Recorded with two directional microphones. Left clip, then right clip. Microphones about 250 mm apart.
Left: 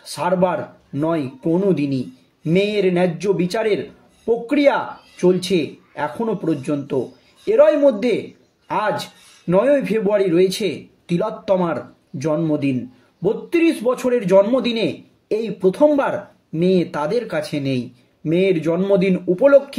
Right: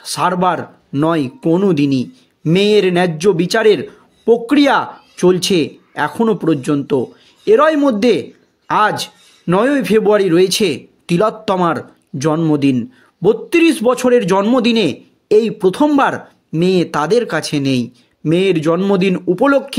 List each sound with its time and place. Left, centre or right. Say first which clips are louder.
0.0 s a man's voice: right 4 dB; right